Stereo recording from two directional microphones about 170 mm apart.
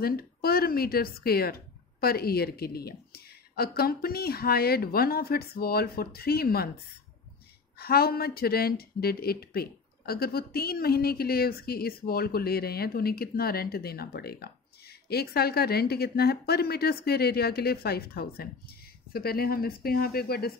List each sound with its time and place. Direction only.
0.0 s speech: 60° left (ahead or behind)
7.8 s speech: 65° left (ahead or behind)